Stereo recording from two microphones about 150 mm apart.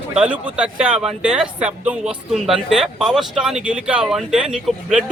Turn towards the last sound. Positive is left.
turn(degrees=-5)  # may be behind; listen again after turning